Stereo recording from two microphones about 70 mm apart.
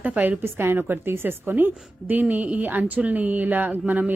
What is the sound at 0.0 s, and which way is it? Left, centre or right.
A woman's voice, right.